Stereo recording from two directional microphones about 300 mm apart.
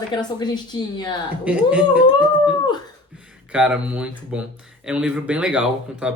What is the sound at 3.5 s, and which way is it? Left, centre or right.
Speech, centre.